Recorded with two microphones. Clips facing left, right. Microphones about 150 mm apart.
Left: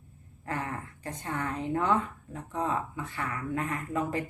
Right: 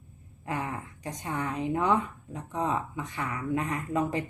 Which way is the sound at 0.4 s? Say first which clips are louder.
Right 1 dB; 15° right (ahead or behind).